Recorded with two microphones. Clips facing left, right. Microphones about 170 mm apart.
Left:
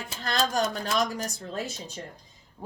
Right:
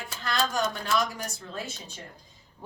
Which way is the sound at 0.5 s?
40° left (ahead or behind).